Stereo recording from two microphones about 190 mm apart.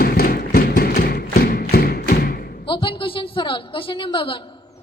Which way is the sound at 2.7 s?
25° left (ahead or behind).